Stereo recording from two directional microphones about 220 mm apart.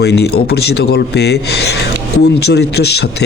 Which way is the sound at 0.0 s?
50° left (ahead or behind).